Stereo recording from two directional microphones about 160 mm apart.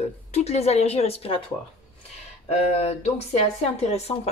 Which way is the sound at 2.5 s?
40° left (ahead or behind).